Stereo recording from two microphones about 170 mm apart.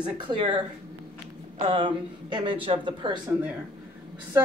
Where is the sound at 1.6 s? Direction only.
30° right (ahead or behind).